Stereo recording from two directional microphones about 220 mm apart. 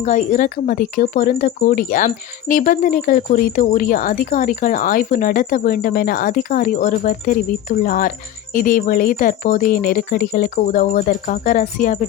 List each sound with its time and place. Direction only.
0.0 s speech: 35° left (ahead or behind)